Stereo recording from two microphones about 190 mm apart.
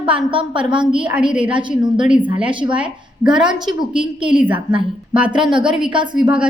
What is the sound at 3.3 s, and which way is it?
Speech, 5° right (ahead or behind).